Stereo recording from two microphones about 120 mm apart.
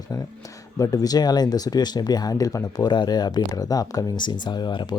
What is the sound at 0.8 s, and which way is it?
Speech, 30° left (ahead or behind).